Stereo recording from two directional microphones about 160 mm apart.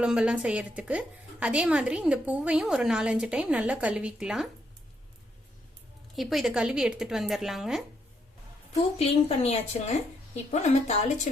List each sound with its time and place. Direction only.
0.0 s a woman's voice: 5° right (ahead or behind)
6.1 s speech: centre (ahead or behind)
8.8 s a woman's voice: 40° left (ahead or behind)